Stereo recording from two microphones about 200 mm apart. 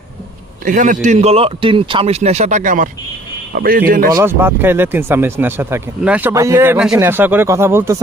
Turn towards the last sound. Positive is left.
turn(degrees=-10)  # may be behind; listen again after turning